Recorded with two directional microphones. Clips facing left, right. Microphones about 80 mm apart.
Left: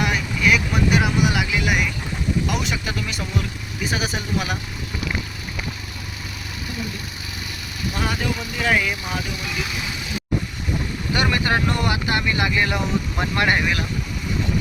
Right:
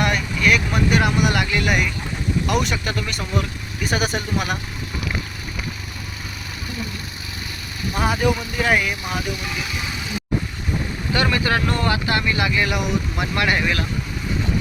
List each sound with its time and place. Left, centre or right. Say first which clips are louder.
0.0 s speech: right 1 dB; centre
7.9 s speech: right 6 dB; centre
11.1 s speech: right 1 dB; left